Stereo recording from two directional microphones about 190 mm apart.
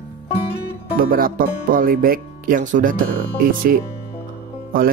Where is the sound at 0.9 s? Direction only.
50° right (ahead or behind).